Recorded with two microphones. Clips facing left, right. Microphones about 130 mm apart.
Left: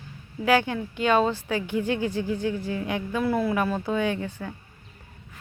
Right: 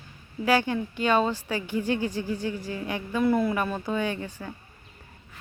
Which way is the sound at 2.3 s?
10° right (ahead or behind).